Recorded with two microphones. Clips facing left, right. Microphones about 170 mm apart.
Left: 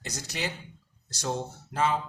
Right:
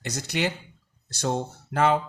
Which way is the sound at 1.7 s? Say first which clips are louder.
Right 5 dB; 65° right (ahead or behind).